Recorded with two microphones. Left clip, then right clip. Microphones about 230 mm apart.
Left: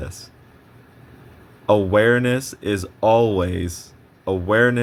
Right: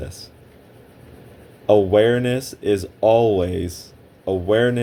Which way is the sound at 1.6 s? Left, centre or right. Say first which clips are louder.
Right 1 dB; left.